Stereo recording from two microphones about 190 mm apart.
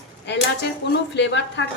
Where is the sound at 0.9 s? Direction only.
65° left (ahead or behind).